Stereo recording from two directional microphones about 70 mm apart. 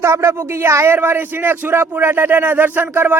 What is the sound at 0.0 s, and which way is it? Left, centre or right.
A man's voice, right.